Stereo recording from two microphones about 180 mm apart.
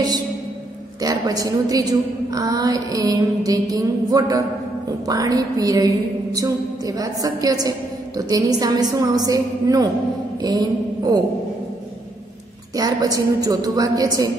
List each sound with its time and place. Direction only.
1.0 s a woman's voice: 20° right (ahead or behind)
10.4 s mantra: 20° right (ahead or behind)
12.7 s a woman's voice: 20° right (ahead or behind)